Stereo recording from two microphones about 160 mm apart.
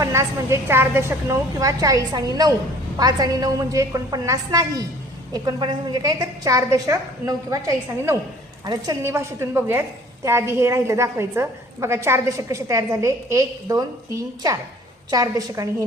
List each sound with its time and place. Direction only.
0.0 s a woman's voice: 15° right (ahead or behind)